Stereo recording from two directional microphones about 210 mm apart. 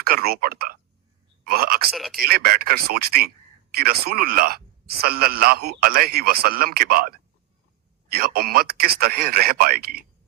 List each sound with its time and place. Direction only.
0.0 s speech: 45° right (ahead or behind)
1.9 s speech: centre (ahead or behind)
2.2 s speech: 45° right (ahead or behind)